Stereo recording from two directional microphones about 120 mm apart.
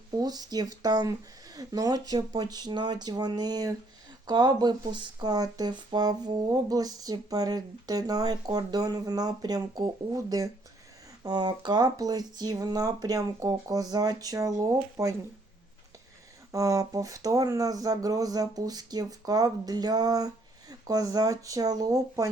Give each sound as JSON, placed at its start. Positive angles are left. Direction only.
{"t": 0.2, "sound": "speech", "side_deg": -35}
{"t": 16.5, "sound": "speech", "side_deg": -30}